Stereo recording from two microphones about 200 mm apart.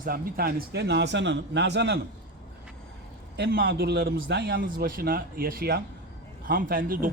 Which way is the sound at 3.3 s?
55° right (ahead or behind).